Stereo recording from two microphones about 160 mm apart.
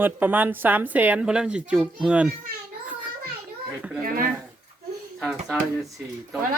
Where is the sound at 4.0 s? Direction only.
60° right (ahead or behind).